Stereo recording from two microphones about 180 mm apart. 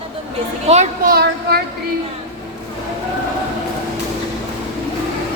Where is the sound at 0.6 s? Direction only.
35° right (ahead or behind).